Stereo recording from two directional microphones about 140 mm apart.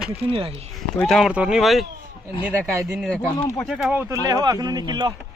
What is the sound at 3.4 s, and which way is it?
Speech, 20° left (ahead or behind).